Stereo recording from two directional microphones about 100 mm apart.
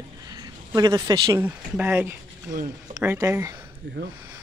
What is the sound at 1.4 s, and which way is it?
Speech, 15° right (ahead or behind).